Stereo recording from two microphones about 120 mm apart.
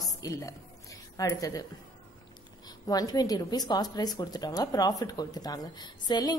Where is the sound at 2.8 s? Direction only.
30° left (ahead or behind).